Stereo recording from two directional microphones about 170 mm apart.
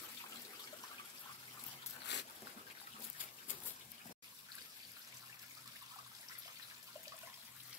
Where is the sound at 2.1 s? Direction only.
90° left.